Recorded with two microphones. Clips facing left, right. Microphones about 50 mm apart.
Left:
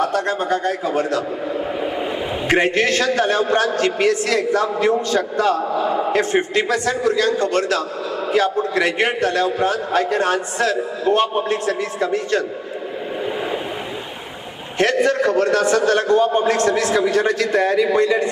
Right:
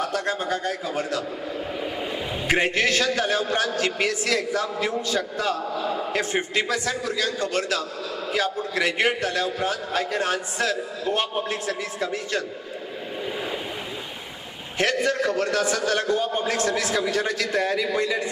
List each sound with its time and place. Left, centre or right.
0.0 s a man's voice: centre
1.5 s vehicle: centre
2.4 s a man's voice: centre
5.6 s a man's voice: centre
6.5 s a man's voice: centre
14.8 s a man's voice: centre